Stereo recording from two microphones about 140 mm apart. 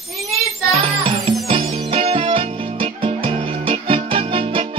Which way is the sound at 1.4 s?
45° right (ahead or behind).